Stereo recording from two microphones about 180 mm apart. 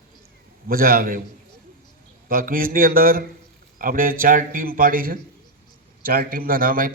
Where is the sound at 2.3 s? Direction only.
50° right (ahead or behind).